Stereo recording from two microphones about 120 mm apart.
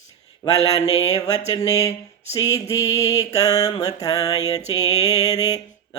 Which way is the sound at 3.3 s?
30° left (ahead or behind).